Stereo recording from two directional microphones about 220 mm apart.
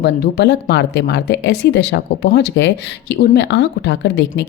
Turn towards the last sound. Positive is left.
turn(degrees=50)  # may be behind; listen again after turning